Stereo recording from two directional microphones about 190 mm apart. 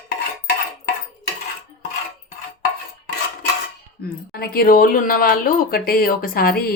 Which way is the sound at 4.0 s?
50° left (ahead or behind).